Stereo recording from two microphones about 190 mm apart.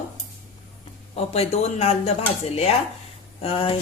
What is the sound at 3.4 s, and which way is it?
Speech, 30° left (ahead or behind).